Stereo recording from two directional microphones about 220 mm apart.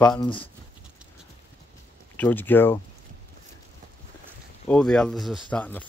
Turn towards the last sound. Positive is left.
turn(degrees=5)  # may be behind; listen again after turning